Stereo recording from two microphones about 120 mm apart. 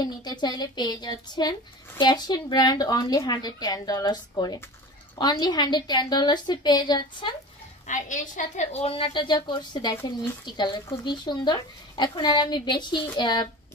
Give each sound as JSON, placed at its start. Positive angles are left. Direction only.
{"t": 0.0, "sound": "a woman's voice", "side_deg": 35}
{"t": 7.8, "sound": "a woman's voice", "side_deg": 90}